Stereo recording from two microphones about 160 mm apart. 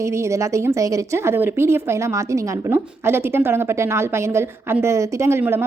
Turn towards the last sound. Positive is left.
turn(degrees=-15)  # may be behind; listen again after turning